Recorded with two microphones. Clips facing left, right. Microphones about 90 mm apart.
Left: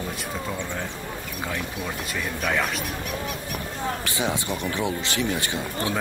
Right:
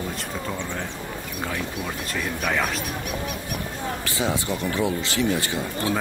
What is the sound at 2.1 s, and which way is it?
Speech, 10° right (ahead or behind).